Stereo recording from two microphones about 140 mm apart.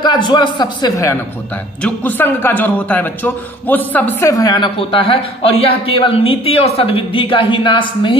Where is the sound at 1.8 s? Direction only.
15° left (ahead or behind).